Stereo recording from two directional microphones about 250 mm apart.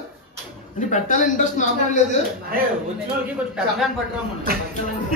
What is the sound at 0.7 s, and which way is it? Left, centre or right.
A man's voice, left.